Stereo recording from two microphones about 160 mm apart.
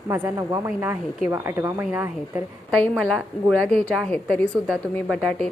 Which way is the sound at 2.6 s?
5° left (ahead or behind).